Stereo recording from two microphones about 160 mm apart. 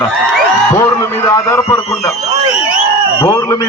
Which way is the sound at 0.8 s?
15° left (ahead or behind).